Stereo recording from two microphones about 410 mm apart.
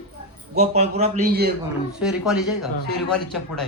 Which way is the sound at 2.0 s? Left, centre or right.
Centre.